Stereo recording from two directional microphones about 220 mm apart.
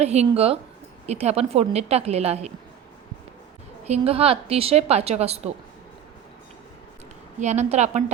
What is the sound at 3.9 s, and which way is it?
A woman's voice, 25° right (ahead or behind).